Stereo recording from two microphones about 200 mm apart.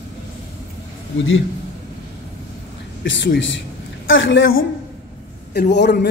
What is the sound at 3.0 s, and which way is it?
A man's voice, 60° left (ahead or behind).